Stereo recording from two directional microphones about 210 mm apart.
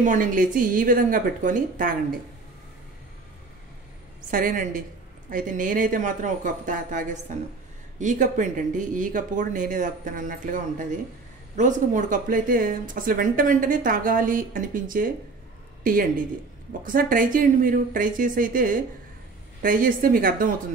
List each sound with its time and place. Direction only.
0.0 s speech: 40° right (ahead or behind)
4.3 s speech: 40° right (ahead or behind)